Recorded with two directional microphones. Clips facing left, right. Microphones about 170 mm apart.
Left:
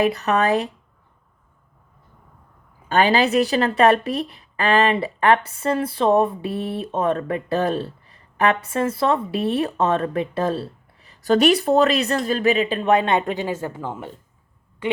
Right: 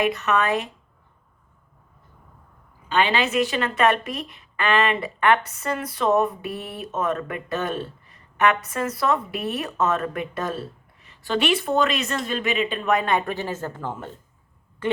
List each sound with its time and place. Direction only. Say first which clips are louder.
0.0 s speech: left 3 dB; 35° left (ahead or behind)
2.9 s speech: left 4 dB; 40° left (ahead or behind); by 14.1 s 10° left (ahead or behind)